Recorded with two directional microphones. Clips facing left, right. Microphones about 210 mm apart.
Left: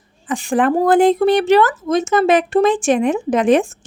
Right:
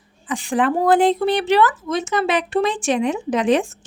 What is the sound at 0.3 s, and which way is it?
Speech, 45° left (ahead or behind).